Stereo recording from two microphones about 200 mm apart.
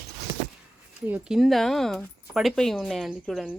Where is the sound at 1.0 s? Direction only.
5° right (ahead or behind).